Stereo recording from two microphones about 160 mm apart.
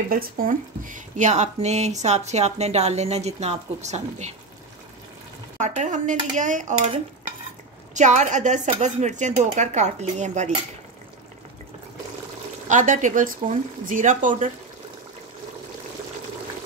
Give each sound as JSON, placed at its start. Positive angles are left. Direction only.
{"t": 0.1, "sound": "speech", "side_deg": -65}
{"t": 5.6, "sound": "speech", "side_deg": -50}
{"t": 7.9, "sound": "speech", "side_deg": -50}
{"t": 12.6, "sound": "speech", "side_deg": -50}